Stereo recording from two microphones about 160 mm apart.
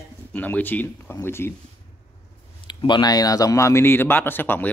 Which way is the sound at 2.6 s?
30° left (ahead or behind).